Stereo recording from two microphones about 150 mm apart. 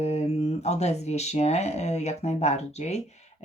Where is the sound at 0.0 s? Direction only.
45° left (ahead or behind).